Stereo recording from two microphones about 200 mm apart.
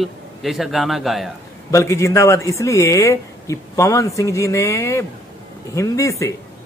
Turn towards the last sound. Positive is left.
turn(degrees=15)  # may be behind; listen again after turning